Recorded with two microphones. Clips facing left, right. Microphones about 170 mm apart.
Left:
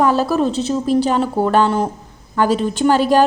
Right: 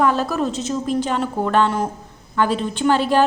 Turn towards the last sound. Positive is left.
turn(degrees=40)  # may be behind; listen again after turning